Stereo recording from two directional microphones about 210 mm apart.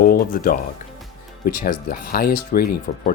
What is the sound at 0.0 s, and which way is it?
Speech, 45° left (ahead or behind).